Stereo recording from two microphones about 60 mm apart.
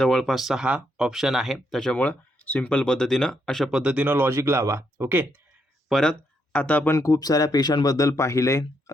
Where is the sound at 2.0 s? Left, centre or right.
Left; by 3.7 s centre.